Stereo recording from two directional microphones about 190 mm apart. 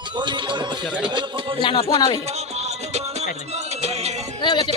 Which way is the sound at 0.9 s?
5° right (ahead or behind).